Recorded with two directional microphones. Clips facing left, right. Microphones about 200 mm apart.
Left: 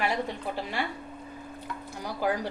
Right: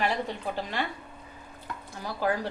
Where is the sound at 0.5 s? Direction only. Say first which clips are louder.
Even; 10° left (ahead or behind).